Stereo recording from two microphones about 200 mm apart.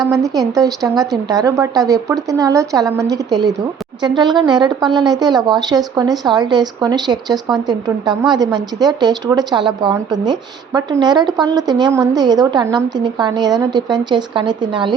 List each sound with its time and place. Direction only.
0.1 s a woman's voice: 15° right (ahead or behind)